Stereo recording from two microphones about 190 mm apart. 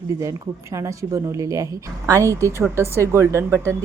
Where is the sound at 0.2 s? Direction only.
15° right (ahead or behind).